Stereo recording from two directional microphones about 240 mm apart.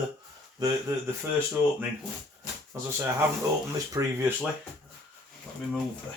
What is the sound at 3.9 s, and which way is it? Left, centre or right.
Speech, centre.